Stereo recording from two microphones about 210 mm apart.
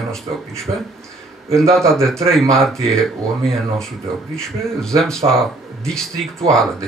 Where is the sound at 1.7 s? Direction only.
Centre (ahead or behind).